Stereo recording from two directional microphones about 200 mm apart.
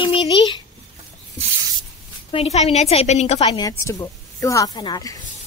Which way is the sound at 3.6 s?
15° left (ahead or behind).